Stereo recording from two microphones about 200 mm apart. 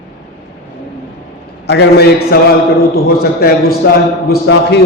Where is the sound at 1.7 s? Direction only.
55° left (ahead or behind).